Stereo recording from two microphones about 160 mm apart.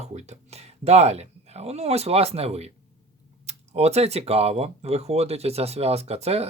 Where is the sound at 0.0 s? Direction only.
45° right (ahead or behind).